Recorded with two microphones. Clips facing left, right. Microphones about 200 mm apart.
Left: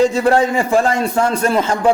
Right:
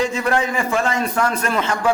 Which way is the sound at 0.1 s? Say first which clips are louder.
Left 6 dB; 35° left (ahead or behind).